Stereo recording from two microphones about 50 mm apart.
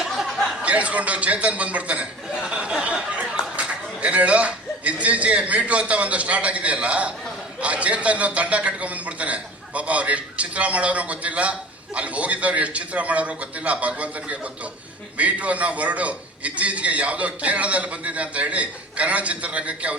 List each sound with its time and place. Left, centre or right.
0.2 s a sound: centre
0.6 s a man's voice: right
2.3 s chuckle: centre
2.8 s a man's voice: right